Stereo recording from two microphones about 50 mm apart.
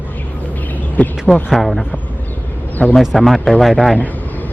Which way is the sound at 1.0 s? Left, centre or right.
Left.